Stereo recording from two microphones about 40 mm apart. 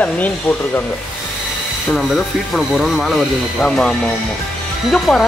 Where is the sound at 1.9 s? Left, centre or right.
Centre.